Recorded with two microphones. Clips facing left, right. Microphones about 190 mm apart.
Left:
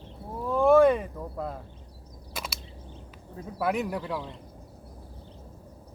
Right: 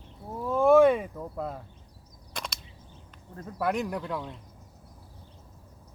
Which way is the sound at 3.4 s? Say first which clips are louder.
Left 1 dB; 5° left (ahead or behind).